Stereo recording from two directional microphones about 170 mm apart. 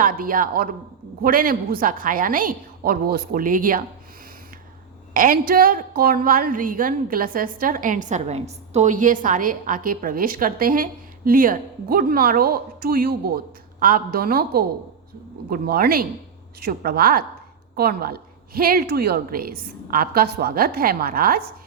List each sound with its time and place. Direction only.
0.0 s a woman's voice: 55° right (ahead or behind)
5.1 s a woman's voice: 55° right (ahead or behind)